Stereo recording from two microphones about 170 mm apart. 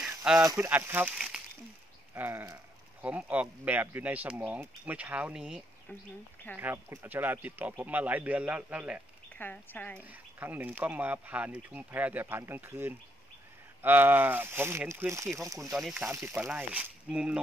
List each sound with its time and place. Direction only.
0.0 s a sound: 5° right (ahead or behind)
0.4 s speech: 15° right (ahead or behind)
6.6 s speech: 15° right (ahead or behind)
9.4 s speech: 10° left (ahead or behind)
10.4 s speech: 10° right (ahead or behind)
15.7 s speech: 5° right (ahead or behind)